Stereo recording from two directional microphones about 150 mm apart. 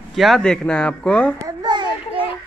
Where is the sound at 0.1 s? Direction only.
Centre (ahead or behind).